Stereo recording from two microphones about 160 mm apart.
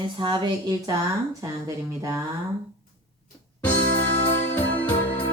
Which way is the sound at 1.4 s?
20° right (ahead or behind).